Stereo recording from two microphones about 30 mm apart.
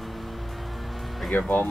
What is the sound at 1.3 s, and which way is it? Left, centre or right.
Speech, left.